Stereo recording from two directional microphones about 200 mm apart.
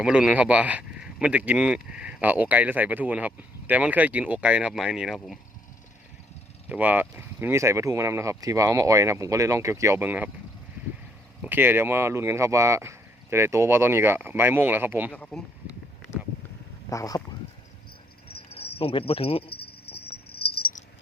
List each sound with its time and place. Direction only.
0.0 s speech: 5° right (ahead or behind)
6.7 s speech: 10° right (ahead or behind)
11.4 s speech: 10° right (ahead or behind)
15.1 s speech: 5° left (ahead or behind)
16.9 s speech: 15° left (ahead or behind)
18.5 s speech: 30° left (ahead or behind)
19.5 s cricket: 50° left (ahead or behind)